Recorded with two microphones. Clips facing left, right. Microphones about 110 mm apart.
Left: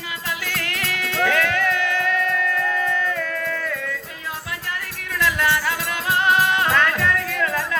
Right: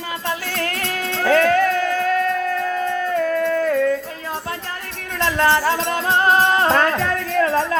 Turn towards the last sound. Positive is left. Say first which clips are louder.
# right 6 dB
turn(degrees=-35)  # may be behind; listen again after turning